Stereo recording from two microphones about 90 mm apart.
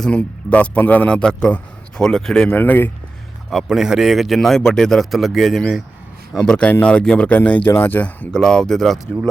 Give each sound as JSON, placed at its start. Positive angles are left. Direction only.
{"t": 0.2, "sound": "a man's voice", "side_deg": 15}
{"t": 2.5, "sound": "speech", "side_deg": 20}
{"t": 3.5, "sound": "a man's voice", "side_deg": -5}